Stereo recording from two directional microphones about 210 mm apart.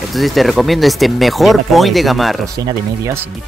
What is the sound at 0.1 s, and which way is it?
Speech, centre (ahead or behind).